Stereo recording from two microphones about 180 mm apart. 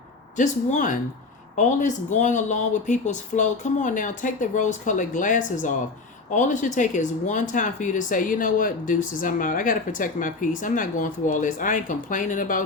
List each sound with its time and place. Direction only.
0.3 s speech: 40° left (ahead or behind)